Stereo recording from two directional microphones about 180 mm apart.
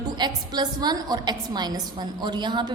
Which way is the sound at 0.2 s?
25° right (ahead or behind).